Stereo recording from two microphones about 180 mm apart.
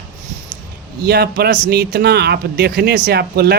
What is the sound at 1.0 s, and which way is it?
Speech, 65° right (ahead or behind).